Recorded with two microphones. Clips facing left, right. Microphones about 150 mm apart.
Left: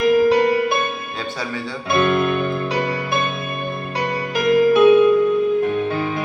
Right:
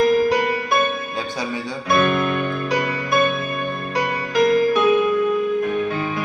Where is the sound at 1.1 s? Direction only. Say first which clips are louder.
Right 1 dB; 20° right (ahead or behind).